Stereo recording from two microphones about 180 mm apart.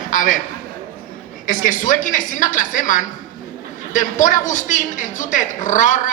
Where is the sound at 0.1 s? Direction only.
45° left (ahead or behind).